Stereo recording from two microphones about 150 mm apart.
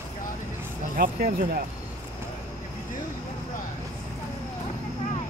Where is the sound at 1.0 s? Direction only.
70° right (ahead or behind).